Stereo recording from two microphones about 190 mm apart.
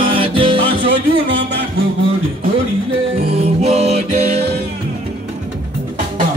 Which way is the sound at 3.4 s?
35° right (ahead or behind).